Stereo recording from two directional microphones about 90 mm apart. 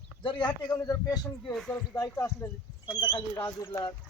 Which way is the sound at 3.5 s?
35° left (ahead or behind).